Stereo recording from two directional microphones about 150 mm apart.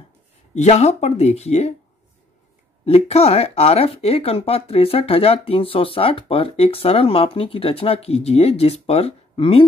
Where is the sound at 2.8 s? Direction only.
45° left (ahead or behind).